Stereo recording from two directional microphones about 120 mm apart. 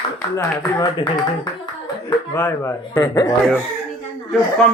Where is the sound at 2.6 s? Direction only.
25° left (ahead or behind).